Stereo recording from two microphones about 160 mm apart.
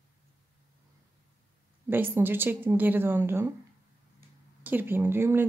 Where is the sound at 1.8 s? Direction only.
15° right (ahead or behind).